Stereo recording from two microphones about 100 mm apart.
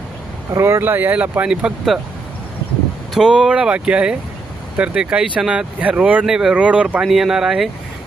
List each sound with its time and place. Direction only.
0.5 s speech: 25° right (ahead or behind); by 2.0 s 10° right (ahead or behind)
3.2 s speech: 5° right (ahead or behind)
7.0 s speech: centre (ahead or behind)